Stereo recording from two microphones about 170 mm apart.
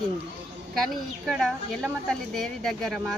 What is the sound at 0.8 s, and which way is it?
A woman's voice, centre (ahead or behind).